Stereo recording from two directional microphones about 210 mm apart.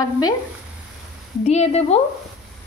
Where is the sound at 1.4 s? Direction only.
30° left (ahead or behind).